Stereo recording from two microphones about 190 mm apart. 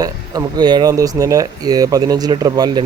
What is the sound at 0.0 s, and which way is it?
Speech, 20° right (ahead or behind).